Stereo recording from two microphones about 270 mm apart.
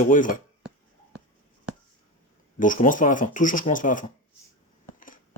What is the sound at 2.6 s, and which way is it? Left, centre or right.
Speech, left.